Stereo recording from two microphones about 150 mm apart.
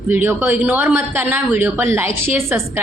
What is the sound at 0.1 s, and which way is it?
A woman's voice, 15° right (ahead or behind).